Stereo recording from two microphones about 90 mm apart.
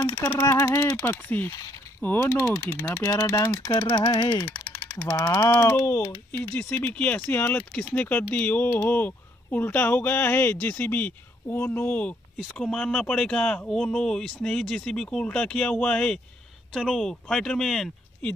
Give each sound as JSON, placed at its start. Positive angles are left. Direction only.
{"t": 0.1, "sound": "speech", "side_deg": 30}
{"t": 1.0, "sound": "speech", "side_deg": 25}
{"t": 2.2, "sound": "speech", "side_deg": 35}
{"t": 4.7, "sound": "a sound", "side_deg": 30}
{"t": 5.5, "sound": "speech", "side_deg": 30}